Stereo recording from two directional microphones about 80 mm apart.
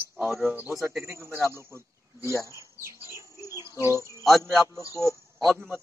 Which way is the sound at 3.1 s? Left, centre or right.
Right.